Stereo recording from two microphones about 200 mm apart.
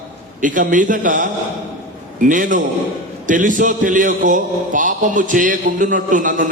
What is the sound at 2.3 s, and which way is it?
A man's voice, 40° right (ahead or behind).